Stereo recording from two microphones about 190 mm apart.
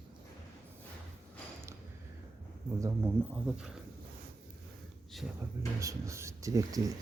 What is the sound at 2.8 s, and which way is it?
Speech, 10° right (ahead or behind).